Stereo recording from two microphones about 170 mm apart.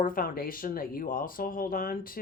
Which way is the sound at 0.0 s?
55° left (ahead or behind).